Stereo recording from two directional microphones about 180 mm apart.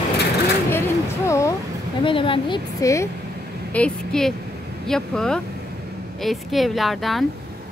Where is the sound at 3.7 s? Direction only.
5° left (ahead or behind).